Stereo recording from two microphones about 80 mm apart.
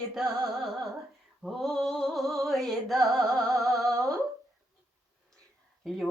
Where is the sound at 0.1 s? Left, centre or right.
Centre.